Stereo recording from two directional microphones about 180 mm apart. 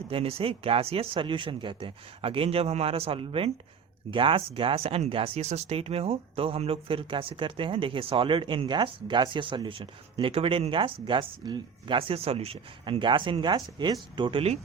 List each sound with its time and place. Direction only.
0.1 s speech: 30° right (ahead or behind)